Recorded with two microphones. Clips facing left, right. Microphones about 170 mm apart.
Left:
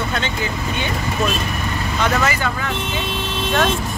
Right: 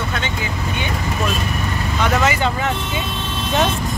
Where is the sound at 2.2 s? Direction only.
20° right (ahead or behind).